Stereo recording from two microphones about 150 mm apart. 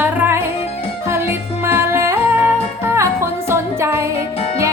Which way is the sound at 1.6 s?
15° right (ahead or behind).